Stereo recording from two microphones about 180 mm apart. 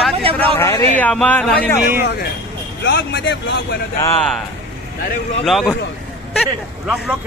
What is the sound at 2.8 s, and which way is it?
Speech, 70° left (ahead or behind).